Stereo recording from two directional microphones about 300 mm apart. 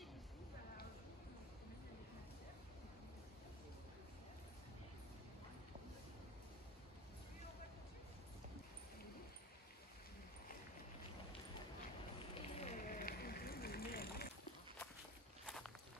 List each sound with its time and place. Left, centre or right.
12.4 s run: left
15.4 s walk: centre